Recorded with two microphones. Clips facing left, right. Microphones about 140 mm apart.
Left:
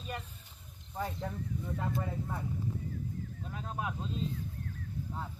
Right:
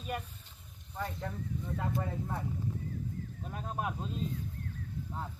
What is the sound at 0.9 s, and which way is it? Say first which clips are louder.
Speech: left 1 dB; 10° left (ahead or behind).